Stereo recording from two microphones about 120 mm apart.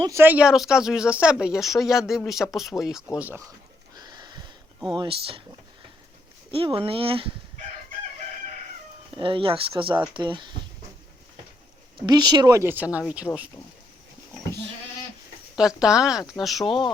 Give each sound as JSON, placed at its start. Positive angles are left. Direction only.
{"t": 0.1, "sound": "speech", "side_deg": -15}
{"t": 3.2, "sound": "speech", "side_deg": -15}
{"t": 3.9, "sound": "a sound", "side_deg": -35}
{"t": 4.9, "sound": "speech", "side_deg": -45}
{"t": 6.5, "sound": "speech", "side_deg": -50}
{"t": 9.1, "sound": "speech", "side_deg": -45}
{"t": 11.9, "sound": "speech", "side_deg": -35}
{"t": 12.7, "sound": "speech", "side_deg": -10}
{"t": 15.5, "sound": "speech", "side_deg": -5}
{"t": 16.6, "sound": "speech", "side_deg": 45}